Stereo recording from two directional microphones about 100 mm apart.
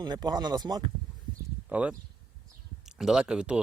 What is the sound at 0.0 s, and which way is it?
Speech, 45° right (ahead or behind).